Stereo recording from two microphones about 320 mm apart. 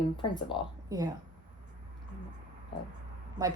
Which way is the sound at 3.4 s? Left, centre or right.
Centre.